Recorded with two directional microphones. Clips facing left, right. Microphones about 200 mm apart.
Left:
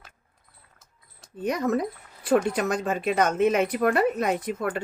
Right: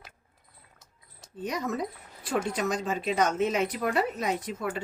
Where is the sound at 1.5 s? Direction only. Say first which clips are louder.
Left 6 dB; 55° left (ahead or behind).